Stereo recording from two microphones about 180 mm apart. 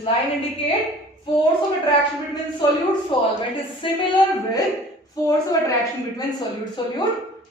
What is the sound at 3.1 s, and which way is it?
Speech, 25° left (ahead or behind).